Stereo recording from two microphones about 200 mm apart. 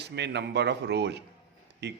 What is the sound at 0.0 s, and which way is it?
A man's voice, 60° right (ahead or behind).